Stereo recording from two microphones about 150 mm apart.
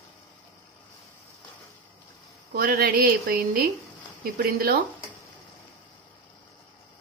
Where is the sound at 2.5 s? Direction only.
75° right (ahead or behind).